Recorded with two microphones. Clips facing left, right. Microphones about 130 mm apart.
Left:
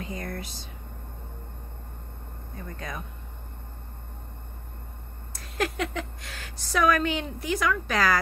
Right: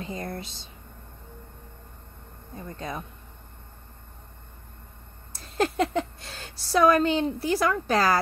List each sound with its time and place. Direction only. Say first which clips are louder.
0.0 s speech: right 1 dB; 25° right (ahead or behind)
2.5 s speech: right 3 dB; 25° right (ahead or behind)
5.3 s speech: right 3 dB; 30° right (ahead or behind)